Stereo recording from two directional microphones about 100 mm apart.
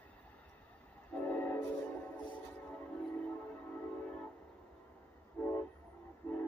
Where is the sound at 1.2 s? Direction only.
15° left (ahead or behind).